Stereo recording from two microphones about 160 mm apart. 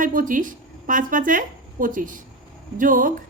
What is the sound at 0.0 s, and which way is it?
A woman's voice, 55° right (ahead or behind).